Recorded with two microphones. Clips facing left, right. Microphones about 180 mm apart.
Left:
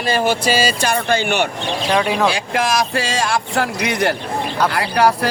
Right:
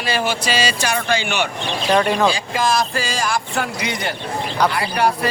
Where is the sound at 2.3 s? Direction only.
75° left (ahead or behind).